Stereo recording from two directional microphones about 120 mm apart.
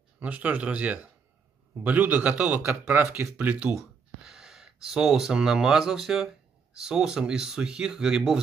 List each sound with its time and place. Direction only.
0.2 s speech: 10° right (ahead or behind)